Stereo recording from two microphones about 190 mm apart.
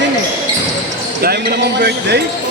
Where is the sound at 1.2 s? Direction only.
55° right (ahead or behind).